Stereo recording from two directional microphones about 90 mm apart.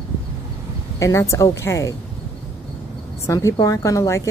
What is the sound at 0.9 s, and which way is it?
A woman's voice, 35° left (ahead or behind).